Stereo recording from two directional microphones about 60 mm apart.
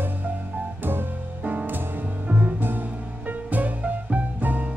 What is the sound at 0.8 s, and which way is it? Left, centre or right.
Music, right.